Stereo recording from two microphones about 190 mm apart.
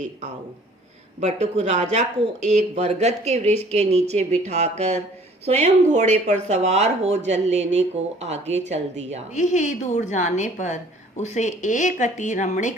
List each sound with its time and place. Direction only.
1.2 s speech: 35° right (ahead or behind)
9.3 s speech: 40° left (ahead or behind)